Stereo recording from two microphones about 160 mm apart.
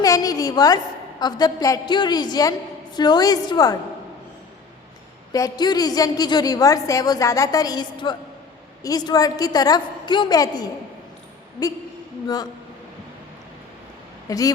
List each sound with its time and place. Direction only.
0.0 s a sound: 20° left (ahead or behind)
1.2 s a woman's voice: 25° left (ahead or behind)
5.3 s a woman's voice: 25° left (ahead or behind)
14.3 s a woman's voice: 20° left (ahead or behind)